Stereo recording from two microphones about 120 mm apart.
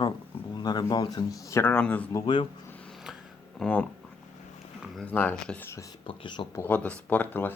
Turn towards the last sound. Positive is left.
turn(degrees=15)  # may be behind; listen again after turning